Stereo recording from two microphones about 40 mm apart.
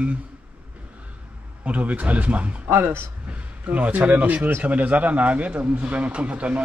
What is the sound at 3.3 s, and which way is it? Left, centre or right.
A man's voice, right.